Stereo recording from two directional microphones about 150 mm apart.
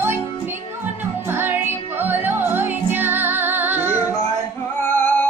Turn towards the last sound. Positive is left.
turn(degrees=10)  # may be behind; listen again after turning